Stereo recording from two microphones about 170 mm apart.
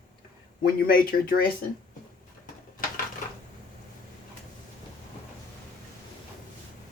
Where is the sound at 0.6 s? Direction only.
60° left (ahead or behind).